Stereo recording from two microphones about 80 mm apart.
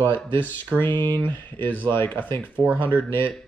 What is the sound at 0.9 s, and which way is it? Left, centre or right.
Speech, right.